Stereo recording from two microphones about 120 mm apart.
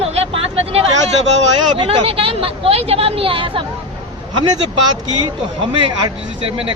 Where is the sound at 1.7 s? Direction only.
50° right (ahead or behind).